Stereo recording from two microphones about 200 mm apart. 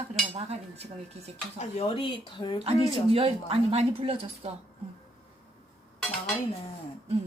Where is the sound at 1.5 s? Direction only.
30° left (ahead or behind).